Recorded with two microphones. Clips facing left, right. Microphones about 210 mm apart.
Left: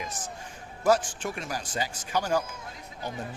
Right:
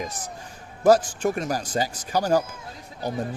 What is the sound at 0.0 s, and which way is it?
Speech, 35° right (ahead or behind).